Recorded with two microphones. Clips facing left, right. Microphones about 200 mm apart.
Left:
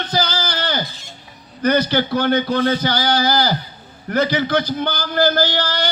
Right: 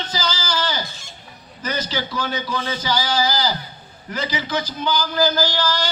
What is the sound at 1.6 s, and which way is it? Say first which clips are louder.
A man's voice: left 9 dB; 60° left (ahead or behind).